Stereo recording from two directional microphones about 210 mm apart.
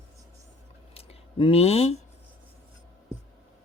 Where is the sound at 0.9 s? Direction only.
25° left (ahead or behind).